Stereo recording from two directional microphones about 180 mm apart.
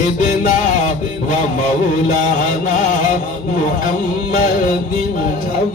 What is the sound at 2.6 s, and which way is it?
Mantra, 45° left (ahead or behind).